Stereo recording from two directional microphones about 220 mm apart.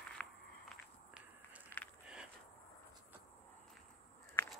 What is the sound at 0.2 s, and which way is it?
Walk, 5° left (ahead or behind).